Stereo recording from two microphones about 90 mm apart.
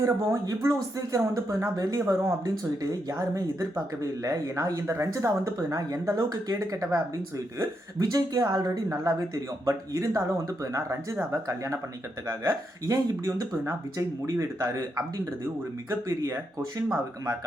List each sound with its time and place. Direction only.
0.0 s speech: 40° right (ahead or behind)